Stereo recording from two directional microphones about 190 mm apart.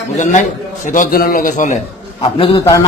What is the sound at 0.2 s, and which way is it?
A man's voice, 40° left (ahead or behind).